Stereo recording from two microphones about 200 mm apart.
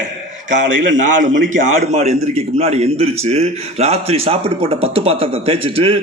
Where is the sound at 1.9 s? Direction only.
35° right (ahead or behind).